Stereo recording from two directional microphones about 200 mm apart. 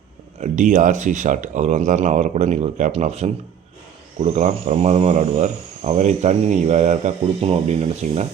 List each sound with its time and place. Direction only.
0.3 s speech: 40° right (ahead or behind)